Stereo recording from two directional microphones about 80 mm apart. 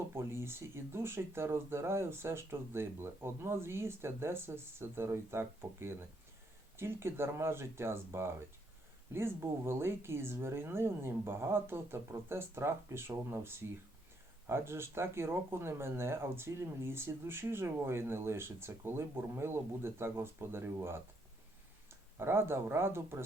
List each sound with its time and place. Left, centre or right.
0.1 s speech: right